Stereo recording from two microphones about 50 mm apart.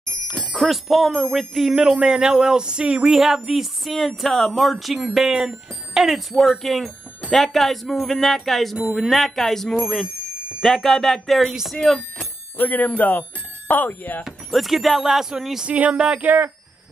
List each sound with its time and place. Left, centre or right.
0.4 s speech: centre
1.8 s speech: centre
6.3 s speech: centre
12.5 s speech: left
14.2 s speech: centre
15.6 s speech: right